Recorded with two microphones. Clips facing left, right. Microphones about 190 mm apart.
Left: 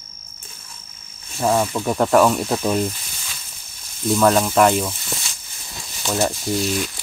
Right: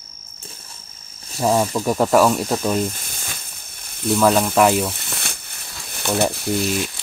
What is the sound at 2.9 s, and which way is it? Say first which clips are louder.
Snake: right 3 dB; 50° right (ahead or behind).